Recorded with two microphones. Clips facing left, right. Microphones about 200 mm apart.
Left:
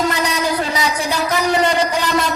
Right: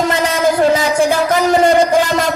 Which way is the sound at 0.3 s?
50° right (ahead or behind).